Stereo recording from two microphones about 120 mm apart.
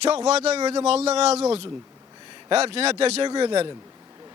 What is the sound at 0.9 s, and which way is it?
A man's voice, 60° right (ahead or behind).